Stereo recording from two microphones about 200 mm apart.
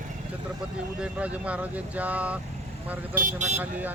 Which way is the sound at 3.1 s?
40° right (ahead or behind).